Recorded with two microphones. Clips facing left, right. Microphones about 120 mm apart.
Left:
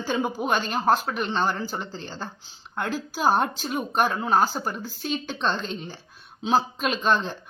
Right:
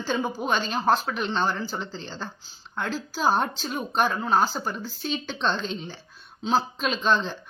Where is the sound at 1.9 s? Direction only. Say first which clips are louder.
Left 1 dB; 45° left (ahead or behind).